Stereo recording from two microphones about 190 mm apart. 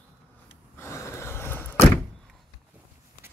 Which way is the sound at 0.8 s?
15° left (ahead or behind).